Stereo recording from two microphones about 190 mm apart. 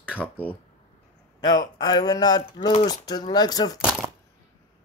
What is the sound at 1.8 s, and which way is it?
Speech, 20° left (ahead or behind).